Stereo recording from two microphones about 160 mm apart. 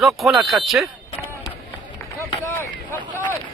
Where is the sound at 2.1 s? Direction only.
15° left (ahead or behind).